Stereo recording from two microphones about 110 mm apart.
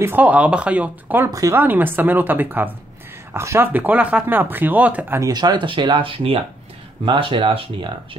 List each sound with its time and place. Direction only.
0.0 s speech: 15° right (ahead or behind)
1.3 s speech: 30° right (ahead or behind)
1.6 s speech: 15° right (ahead or behind)
5.2 s speech: 35° right (ahead or behind); by 8.2 s 55° right (ahead or behind)